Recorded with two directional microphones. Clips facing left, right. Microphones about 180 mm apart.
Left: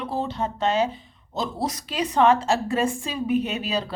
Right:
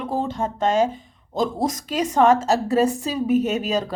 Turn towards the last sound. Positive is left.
turn(degrees=-45)  # may be behind; listen again after turning